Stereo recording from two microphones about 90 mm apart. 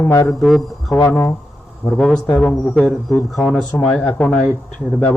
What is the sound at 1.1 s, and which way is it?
Speech, 30° left (ahead or behind).